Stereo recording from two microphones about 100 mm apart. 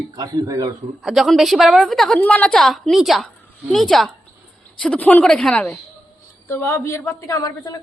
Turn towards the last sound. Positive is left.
turn(degrees=35)  # may be behind; listen again after turning